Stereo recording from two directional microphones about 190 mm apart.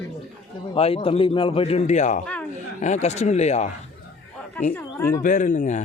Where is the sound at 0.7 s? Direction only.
30° left (ahead or behind).